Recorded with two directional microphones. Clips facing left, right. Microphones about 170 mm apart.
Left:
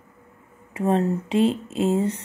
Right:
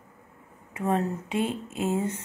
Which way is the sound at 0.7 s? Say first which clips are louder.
Left 5 dB; 30° left (ahead or behind).